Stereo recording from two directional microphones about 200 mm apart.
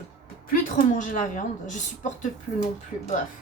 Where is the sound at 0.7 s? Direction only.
40° left (ahead or behind).